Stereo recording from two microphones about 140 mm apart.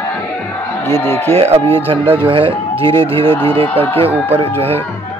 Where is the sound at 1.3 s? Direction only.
45° right (ahead or behind).